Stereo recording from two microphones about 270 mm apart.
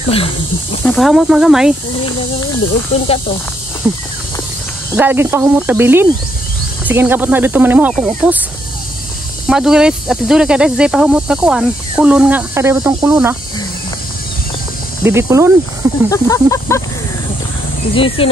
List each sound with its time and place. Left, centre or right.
0.8 s speech: centre
4.9 s speech: centre
9.5 s speech: centre
15.0 s speech: centre
16.1 s speech: centre
17.9 s speech: centre